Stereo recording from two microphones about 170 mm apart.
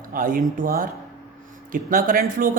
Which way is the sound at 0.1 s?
55° right (ahead or behind).